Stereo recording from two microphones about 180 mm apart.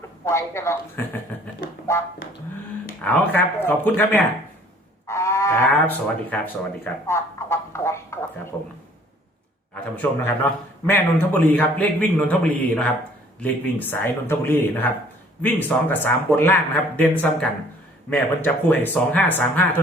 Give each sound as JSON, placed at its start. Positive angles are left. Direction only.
{"t": 0.3, "sound": "a man's voice", "side_deg": 15}
{"t": 3.0, "sound": "a man's voice", "side_deg": 10}
{"t": 5.0, "sound": "livestock", "side_deg": 15}
{"t": 6.3, "sound": "a man's voice", "side_deg": 10}
{"t": 9.7, "sound": "a man's voice", "side_deg": 10}